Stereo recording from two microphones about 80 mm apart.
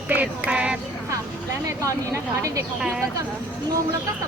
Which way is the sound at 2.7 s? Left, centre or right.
Centre.